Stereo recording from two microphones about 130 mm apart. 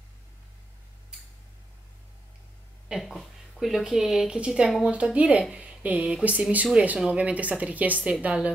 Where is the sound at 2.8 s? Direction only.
Centre (ahead or behind).